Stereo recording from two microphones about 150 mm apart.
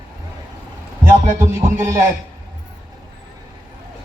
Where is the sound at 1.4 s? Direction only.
20° right (ahead or behind).